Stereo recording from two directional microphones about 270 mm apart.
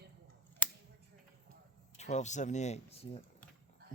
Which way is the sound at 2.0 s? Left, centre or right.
Left.